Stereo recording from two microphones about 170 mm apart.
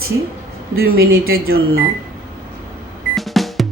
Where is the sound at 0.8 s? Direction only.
65° right (ahead or behind).